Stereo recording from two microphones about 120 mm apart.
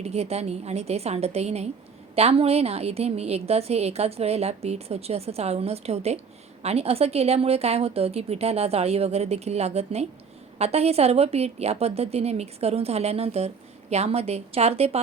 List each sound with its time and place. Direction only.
0.0 s a woman's voice: 60° right (ahead or behind)